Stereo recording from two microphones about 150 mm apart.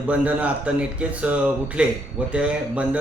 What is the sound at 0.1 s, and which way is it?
A man's voice, 10° right (ahead or behind).